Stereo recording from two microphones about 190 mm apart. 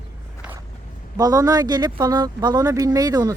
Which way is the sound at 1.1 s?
20° right (ahead or behind).